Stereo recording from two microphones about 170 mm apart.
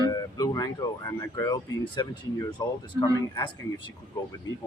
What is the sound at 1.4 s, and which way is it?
Speech, 20° left (ahead or behind).